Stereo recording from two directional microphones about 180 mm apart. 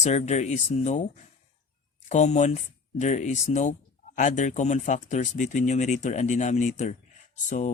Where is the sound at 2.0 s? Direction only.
40° left (ahead or behind).